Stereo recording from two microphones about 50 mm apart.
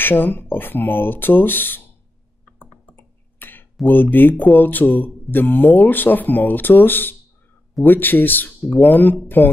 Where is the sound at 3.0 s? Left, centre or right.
Left.